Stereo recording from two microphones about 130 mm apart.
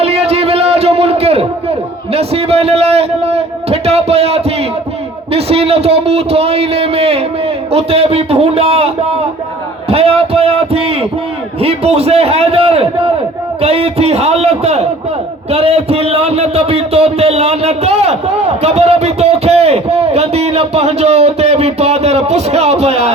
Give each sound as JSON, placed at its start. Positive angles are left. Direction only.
{"t": 0.0, "sound": "a sound", "side_deg": -50}
{"t": 5.3, "sound": "a man's voice", "side_deg": -50}
{"t": 9.9, "sound": "a man's voice", "side_deg": -50}